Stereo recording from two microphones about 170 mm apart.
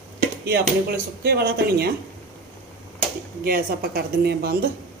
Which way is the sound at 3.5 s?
60° right (ahead or behind).